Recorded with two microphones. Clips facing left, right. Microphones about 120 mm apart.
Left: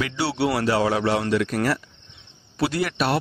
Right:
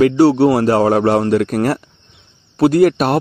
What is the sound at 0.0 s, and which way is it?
A man's voice, 45° right (ahead or behind).